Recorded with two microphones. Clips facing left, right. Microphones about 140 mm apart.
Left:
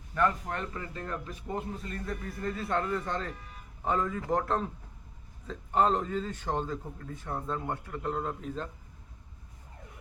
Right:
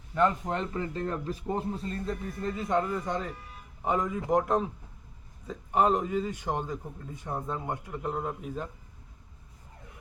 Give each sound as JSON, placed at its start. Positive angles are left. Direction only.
{"t": 0.1, "sound": "a man's voice", "side_deg": -20}